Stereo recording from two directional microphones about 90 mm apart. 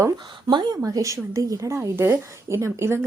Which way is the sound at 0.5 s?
55° right (ahead or behind).